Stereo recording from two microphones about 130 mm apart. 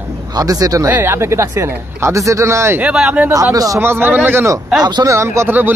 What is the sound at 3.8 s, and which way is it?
Speech, 15° right (ahead or behind).